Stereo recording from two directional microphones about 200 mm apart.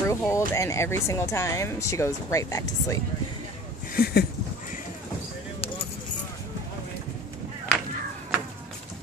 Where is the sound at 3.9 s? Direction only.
50° left (ahead or behind).